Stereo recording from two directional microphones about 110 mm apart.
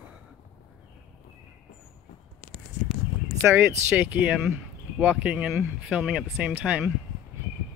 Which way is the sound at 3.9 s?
15° right (ahead or behind).